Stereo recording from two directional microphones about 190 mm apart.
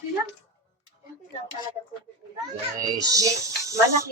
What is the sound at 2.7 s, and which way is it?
Speech, 20° right (ahead or behind).